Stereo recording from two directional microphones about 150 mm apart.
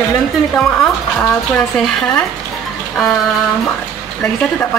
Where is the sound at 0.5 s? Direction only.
5° left (ahead or behind).